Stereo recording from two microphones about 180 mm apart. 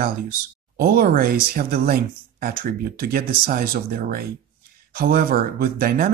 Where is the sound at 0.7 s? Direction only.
55° right (ahead or behind).